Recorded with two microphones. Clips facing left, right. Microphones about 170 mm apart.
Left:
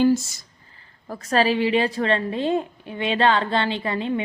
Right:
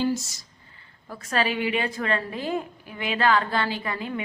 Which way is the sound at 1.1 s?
35° left (ahead or behind).